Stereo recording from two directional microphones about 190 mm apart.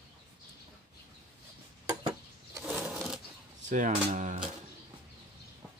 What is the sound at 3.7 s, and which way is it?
Speech, 40° right (ahead or behind).